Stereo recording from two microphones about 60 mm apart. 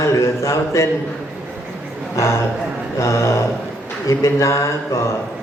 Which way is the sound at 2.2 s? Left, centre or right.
Left.